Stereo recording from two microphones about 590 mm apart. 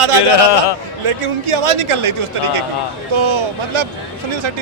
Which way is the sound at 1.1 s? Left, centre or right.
Right.